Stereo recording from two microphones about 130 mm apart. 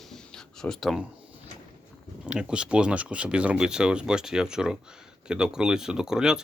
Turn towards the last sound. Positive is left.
turn(degrees=-5)  # may be behind; listen again after turning